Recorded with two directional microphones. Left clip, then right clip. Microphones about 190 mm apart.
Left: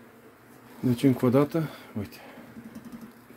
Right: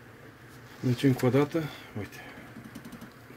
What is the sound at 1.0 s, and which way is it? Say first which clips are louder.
Speech: left 2 dB; 20° left (ahead or behind).